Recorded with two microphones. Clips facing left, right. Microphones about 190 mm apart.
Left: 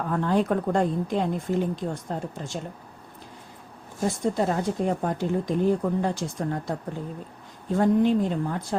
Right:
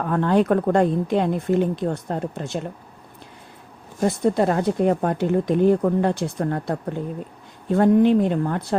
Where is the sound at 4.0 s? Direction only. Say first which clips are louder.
Right 5 dB; 65° right (ahead or behind).